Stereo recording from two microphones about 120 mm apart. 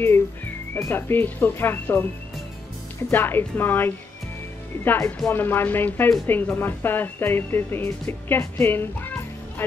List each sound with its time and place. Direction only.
0.7 s speech: 20° left (ahead or behind)
3.1 s speech: 15° left (ahead or behind)